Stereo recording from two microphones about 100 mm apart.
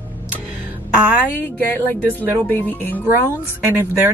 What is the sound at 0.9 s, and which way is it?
Speech, 15° right (ahead or behind).